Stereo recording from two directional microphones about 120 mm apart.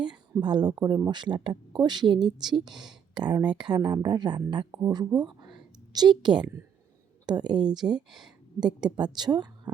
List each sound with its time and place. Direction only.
0.3 s speech: 35° right (ahead or behind)
7.9 s speech: 5° right (ahead or behind)
8.6 s speech: 35° right (ahead or behind)